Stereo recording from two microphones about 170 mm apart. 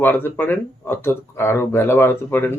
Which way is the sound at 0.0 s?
10° left (ahead or behind).